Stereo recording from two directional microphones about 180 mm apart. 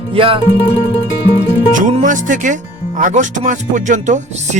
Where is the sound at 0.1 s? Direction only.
30° right (ahead or behind).